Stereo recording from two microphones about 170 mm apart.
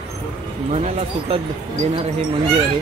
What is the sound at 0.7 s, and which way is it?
Speech, 40° right (ahead or behind).